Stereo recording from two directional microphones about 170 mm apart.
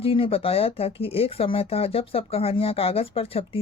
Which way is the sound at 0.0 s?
35° left (ahead or behind).